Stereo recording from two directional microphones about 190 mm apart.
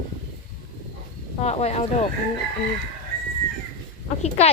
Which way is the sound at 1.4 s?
35° left (ahead or behind).